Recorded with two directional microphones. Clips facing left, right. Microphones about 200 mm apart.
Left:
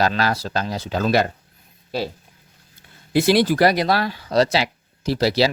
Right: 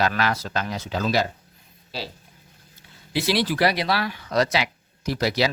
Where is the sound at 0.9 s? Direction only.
50° left (ahead or behind).